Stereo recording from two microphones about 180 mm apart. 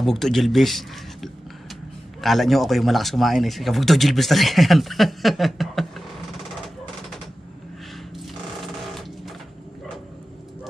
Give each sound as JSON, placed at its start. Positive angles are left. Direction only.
{"t": 0.0, "sound": "speech", "side_deg": 0}